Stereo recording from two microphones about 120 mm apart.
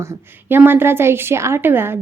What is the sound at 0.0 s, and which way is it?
A woman's voice, 15° right (ahead or behind).